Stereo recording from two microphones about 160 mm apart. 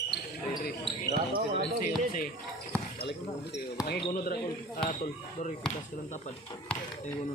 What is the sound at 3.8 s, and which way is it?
Speech, 80° left.